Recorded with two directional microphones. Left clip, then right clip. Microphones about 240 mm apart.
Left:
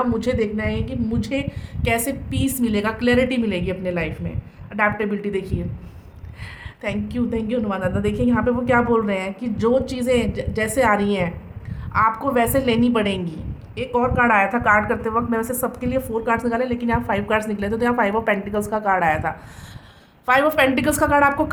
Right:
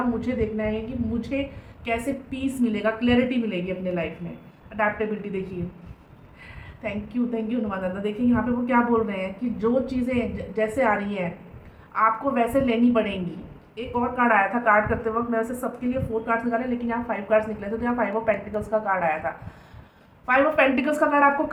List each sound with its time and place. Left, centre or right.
0.2 s a woman's voice: left
1.8 s a woman's voice: left
6.8 s a woman's voice: left